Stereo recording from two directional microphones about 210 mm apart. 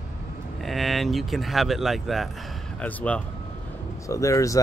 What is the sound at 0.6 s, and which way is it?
Speech, centre (ahead or behind).